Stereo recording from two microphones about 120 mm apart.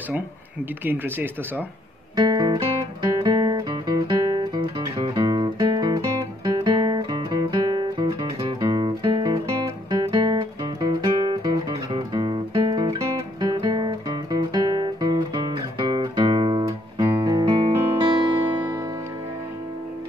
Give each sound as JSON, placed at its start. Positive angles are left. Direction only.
{"t": 0.8, "sound": "speech", "side_deg": -15}
{"t": 2.1, "sound": "guitar", "side_deg": -35}
{"t": 8.5, "sound": "music", "side_deg": -35}
{"t": 16.6, "sound": "music", "side_deg": -25}